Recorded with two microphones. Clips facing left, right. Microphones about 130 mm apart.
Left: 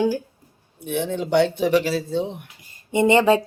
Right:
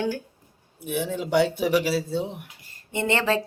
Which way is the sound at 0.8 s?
5° right (ahead or behind).